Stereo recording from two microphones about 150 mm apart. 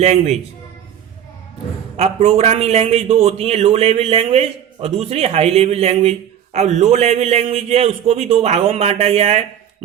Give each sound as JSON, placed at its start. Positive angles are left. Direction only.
{"t": 0.0, "sound": "a man's voice", "side_deg": -45}
{"t": 2.0, "sound": "a man's voice", "side_deg": -45}